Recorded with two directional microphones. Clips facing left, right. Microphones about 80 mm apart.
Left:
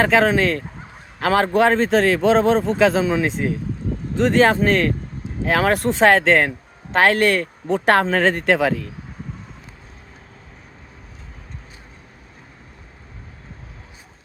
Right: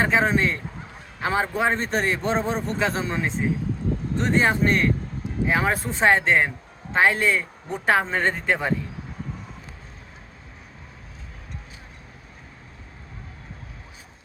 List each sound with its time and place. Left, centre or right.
0.0 s a man's voice: left
5.5 s speech: left
6.9 s speech: left